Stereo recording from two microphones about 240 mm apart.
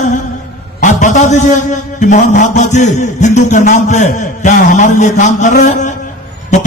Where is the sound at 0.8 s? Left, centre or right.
Left.